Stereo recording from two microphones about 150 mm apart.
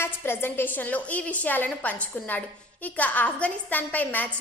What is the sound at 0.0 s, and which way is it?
A woman's voice, 15° left (ahead or behind).